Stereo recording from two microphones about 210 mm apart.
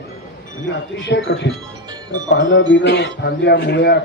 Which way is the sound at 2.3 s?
40° left (ahead or behind).